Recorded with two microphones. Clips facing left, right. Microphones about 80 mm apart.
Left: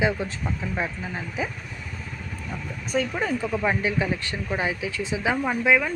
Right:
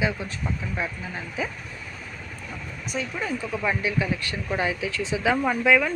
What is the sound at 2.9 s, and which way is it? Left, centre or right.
Speech, left.